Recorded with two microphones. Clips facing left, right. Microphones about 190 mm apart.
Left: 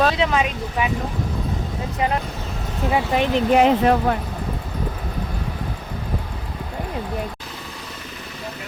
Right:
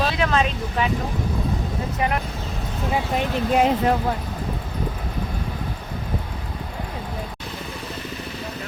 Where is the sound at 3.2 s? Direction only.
75° left (ahead or behind).